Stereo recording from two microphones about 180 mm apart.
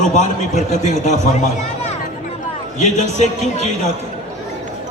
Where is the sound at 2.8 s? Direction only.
40° left (ahead or behind).